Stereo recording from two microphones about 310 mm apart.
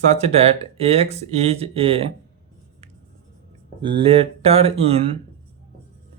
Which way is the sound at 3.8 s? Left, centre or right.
Centre.